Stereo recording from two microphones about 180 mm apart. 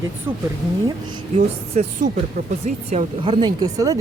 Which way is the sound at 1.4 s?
45° right (ahead or behind).